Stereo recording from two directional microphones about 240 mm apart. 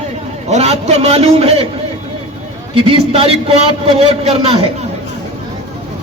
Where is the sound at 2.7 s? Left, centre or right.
Right.